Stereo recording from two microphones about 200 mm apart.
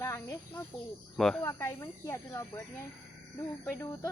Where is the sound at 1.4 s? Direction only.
15° left (ahead or behind).